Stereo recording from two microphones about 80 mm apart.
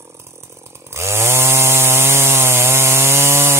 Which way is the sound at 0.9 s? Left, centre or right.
Right.